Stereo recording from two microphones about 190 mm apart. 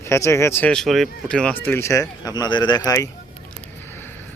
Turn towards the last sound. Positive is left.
turn(degrees=20)  # may be behind; listen again after turning